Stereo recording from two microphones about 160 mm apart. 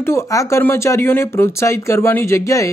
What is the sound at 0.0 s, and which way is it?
Speech, 15° left (ahead or behind).